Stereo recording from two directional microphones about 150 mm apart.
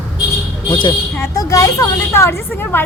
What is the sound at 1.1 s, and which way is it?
A woman's voice, 20° left (ahead or behind).